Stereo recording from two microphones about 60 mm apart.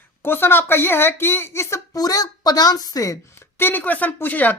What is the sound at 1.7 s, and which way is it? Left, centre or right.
A child's voice, left.